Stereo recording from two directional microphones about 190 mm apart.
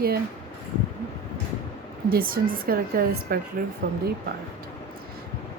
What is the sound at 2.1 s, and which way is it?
Speech, 50° right (ahead or behind).